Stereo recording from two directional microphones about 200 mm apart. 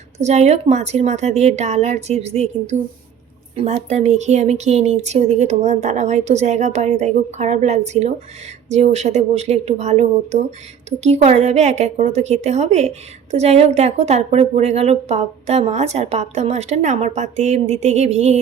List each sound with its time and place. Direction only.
0.2 s a woman's voice: 35° right (ahead or behind)